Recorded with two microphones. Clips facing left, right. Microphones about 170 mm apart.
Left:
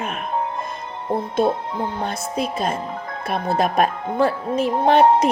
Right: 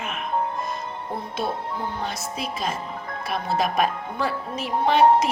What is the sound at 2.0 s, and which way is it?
Speech, 50° left (ahead or behind).